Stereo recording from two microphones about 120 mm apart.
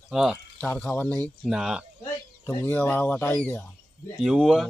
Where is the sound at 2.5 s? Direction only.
15° left (ahead or behind).